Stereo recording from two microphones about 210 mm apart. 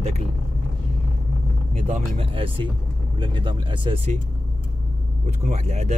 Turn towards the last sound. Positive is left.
turn(degrees=-30)  # may be behind; listen again after turning